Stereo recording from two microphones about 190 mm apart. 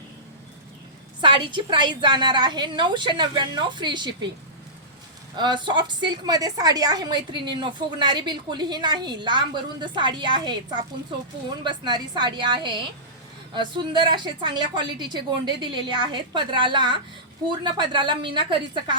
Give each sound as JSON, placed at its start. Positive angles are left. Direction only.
{"t": 1.2, "sound": "a woman's voice", "side_deg": -25}
{"t": 5.4, "sound": "a woman's voice", "side_deg": -25}
{"t": 11.6, "sound": "a woman's voice", "side_deg": -25}